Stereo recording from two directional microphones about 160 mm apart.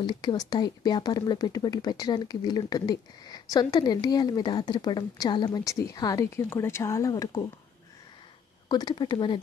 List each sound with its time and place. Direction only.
0.0 s speech: 25° left (ahead or behind)
8.6 s speech: 25° left (ahead or behind)